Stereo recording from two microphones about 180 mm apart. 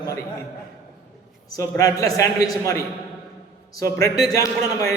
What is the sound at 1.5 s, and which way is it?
Speech, 20° left (ahead or behind).